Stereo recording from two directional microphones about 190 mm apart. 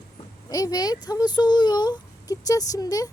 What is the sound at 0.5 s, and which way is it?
Speech, 20° left (ahead or behind).